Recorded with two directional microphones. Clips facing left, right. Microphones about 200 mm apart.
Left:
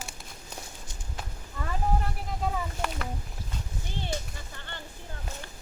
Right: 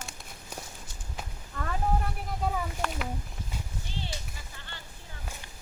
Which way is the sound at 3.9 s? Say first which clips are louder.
Left 5 dB; 55° left (ahead or behind).